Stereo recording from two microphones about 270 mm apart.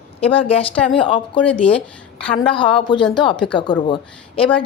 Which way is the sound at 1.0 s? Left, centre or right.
Centre.